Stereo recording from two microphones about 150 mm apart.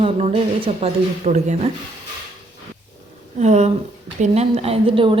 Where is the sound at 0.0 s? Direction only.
40° right (ahead or behind).